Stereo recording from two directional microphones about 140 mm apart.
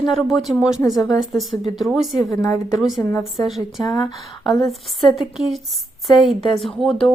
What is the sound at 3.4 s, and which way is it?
Speech, 30° left (ahead or behind).